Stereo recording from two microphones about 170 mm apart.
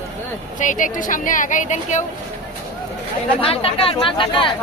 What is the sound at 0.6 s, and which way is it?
A woman's voice, 50° left (ahead or behind).